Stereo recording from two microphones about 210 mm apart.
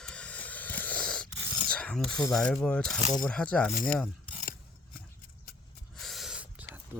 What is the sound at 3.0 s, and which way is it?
Speech, 35° left (ahead or behind).